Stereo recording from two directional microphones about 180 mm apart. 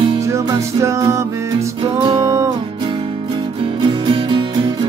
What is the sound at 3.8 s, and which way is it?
Music, 25° right (ahead or behind).